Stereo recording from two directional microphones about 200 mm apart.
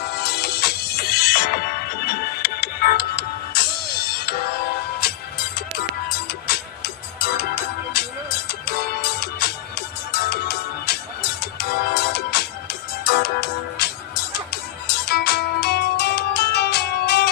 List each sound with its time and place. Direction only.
0.1 s music: 55° left (ahead or behind)
15.0 s music: 55° left (ahead or behind)